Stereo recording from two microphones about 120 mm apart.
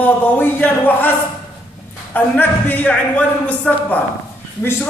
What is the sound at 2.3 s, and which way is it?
A man's voice, 15° left (ahead or behind).